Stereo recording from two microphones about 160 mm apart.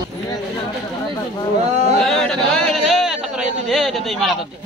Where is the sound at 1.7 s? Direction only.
45° right (ahead or behind).